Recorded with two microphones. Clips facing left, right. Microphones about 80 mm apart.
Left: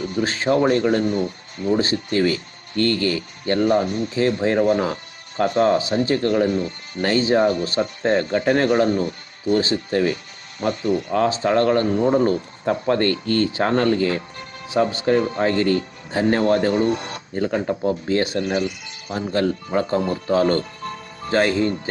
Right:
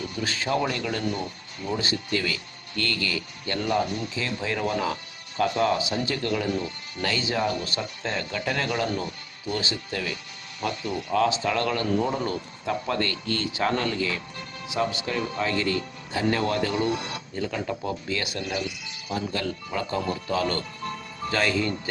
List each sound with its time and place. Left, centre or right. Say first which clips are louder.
0.2 s speech: left 8 dB; left